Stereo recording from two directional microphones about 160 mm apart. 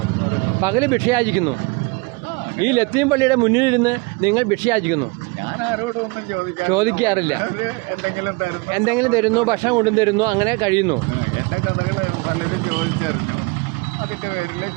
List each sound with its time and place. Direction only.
0.6 s a man's voice: 20° right (ahead or behind)
2.6 s a man's voice: 20° right (ahead or behind)
6.6 s a man's voice: 20° right (ahead or behind)
8.7 s a man's voice: 20° right (ahead or behind)